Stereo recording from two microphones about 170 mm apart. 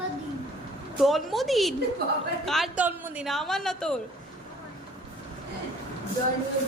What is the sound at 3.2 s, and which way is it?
Speech, centre (ahead or behind).